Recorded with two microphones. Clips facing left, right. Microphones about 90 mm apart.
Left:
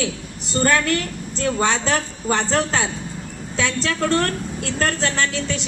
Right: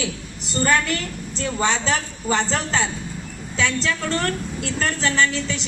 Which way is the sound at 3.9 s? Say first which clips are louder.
Left 5 dB; 55° left (ahead or behind).